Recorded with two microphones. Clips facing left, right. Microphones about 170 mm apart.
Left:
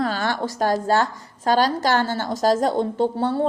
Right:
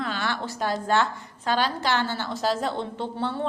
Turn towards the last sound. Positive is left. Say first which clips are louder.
# left 8 dB
turn(degrees=40)  # may be behind; listen again after turning